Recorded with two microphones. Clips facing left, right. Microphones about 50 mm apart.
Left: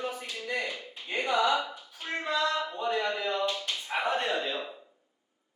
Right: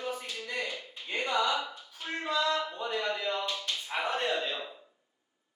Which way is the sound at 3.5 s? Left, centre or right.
Centre.